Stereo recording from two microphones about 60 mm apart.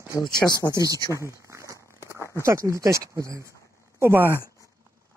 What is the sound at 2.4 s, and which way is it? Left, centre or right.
Speech, right.